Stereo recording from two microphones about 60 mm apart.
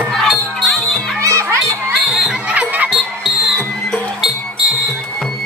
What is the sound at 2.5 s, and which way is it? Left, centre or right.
Music, right.